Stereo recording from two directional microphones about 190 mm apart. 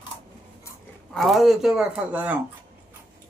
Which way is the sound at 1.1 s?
Centre (ahead or behind).